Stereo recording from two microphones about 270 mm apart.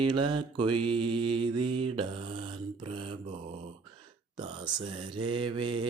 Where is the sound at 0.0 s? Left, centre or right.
Centre.